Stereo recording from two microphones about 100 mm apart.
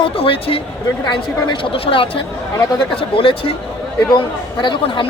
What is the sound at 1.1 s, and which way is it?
Speech, 50° left (ahead or behind).